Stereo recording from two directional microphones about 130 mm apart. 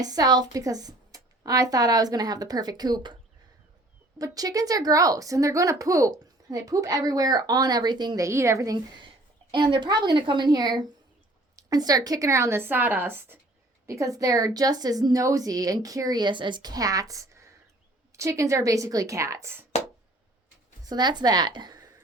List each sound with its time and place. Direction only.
0.0 s a woman's voice: 30° right (ahead or behind)
4.2 s a woman's voice: 25° right (ahead or behind)
20.8 s a woman's voice: 30° right (ahead or behind)